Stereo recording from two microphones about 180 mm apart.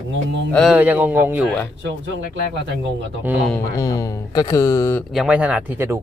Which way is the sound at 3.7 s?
20° left (ahead or behind).